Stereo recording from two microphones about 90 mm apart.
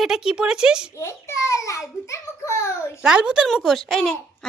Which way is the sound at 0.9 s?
35° left (ahead or behind).